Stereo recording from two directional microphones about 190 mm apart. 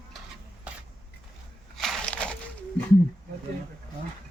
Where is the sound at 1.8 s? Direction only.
Centre (ahead or behind).